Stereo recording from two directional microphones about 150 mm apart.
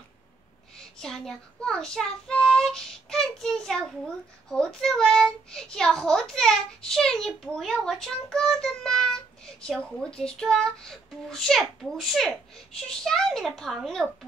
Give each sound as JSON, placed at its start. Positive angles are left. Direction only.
{"t": 0.9, "sound": "child singing", "side_deg": 5}